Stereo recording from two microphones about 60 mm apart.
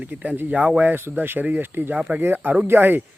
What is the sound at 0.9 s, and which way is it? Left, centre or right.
Speech, right.